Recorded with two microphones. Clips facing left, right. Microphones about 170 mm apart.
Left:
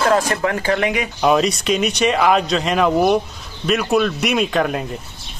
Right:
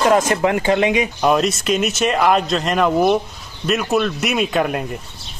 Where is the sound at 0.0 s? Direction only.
15° right (ahead or behind).